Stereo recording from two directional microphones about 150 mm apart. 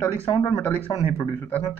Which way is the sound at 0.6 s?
15° left (ahead or behind).